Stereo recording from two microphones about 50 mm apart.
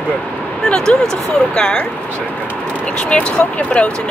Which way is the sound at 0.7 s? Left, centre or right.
Centre.